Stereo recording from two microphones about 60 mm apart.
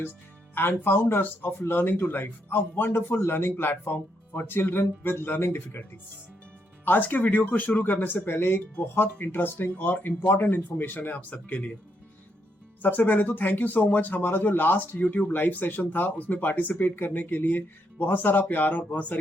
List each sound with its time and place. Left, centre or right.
0.5 s speech: left
6.8 s speech: left
12.8 s speech: left